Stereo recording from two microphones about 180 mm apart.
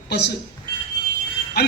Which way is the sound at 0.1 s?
65° left (ahead or behind).